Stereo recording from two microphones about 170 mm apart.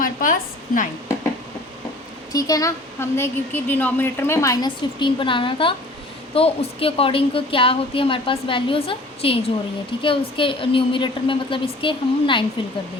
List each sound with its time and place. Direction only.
0.0 s a woman's voice: 55° left (ahead or behind)
2.3 s a woman's voice: 20° left (ahead or behind)